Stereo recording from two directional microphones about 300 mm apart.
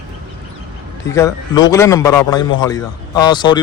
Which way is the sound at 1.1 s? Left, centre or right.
Centre.